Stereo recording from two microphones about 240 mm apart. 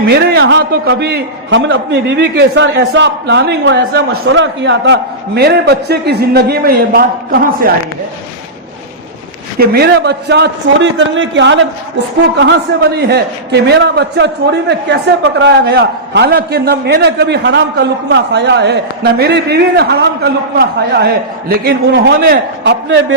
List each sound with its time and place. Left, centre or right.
0.0 s a man's voice: right
9.6 s a man's voice: right
13.0 s a man's voice: right